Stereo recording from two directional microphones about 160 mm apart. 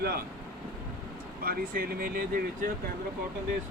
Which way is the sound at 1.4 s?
65° right (ahead or behind).